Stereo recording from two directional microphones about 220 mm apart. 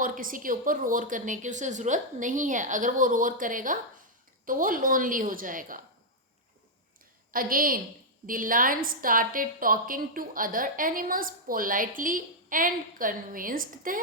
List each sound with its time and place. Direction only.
0.0 s a woman's voice: 40° right (ahead or behind)
7.3 s a woman's voice: 40° right (ahead or behind)